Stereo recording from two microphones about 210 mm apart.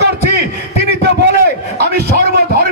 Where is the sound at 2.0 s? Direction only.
45° right (ahead or behind).